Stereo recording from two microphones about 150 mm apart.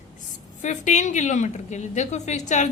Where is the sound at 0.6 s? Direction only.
55° left (ahead or behind).